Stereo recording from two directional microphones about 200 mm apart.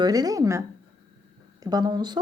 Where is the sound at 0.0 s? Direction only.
20° right (ahead or behind).